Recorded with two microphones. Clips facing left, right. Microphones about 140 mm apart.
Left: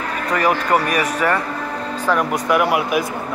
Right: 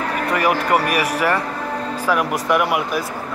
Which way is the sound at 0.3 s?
5° right (ahead or behind).